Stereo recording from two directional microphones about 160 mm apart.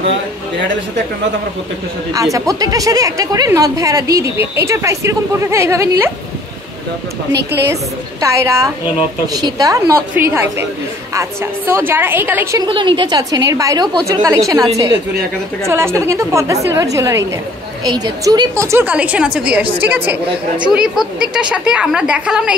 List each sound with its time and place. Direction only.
2.3 s a woman's voice: 20° right (ahead or behind)
7.6 s a woman's voice: 20° right (ahead or behind)
12.5 s a woman's voice: 30° right (ahead or behind); by 20.2 s 10° right (ahead or behind)
20.2 s a woman's voice: 30° right (ahead or behind)
20.7 s a woman's voice: 5° right (ahead or behind)